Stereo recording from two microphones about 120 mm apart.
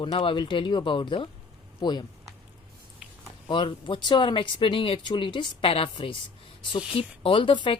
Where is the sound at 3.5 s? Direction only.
45° left (ahead or behind).